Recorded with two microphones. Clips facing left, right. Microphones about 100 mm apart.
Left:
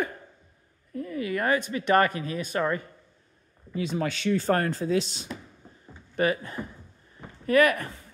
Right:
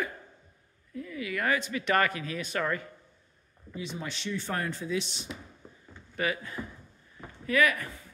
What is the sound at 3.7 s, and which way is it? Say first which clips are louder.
Speech: left 9 dB; 80° left.